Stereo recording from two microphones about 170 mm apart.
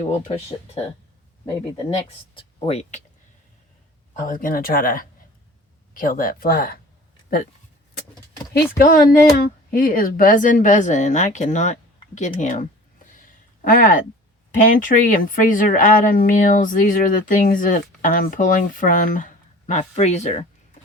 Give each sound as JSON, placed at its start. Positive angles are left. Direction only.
{"t": 0.0, "sound": "speech", "side_deg": 40}
{"t": 4.1, "sound": "speech", "side_deg": 55}
{"t": 8.5, "sound": "speech", "side_deg": 60}
{"t": 13.7, "sound": "speech", "side_deg": 55}